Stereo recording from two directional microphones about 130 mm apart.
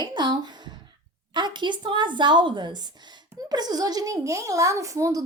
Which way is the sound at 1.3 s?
35° right (ahead or behind).